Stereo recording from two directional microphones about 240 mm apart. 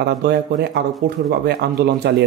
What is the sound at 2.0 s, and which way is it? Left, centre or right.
Speech, right.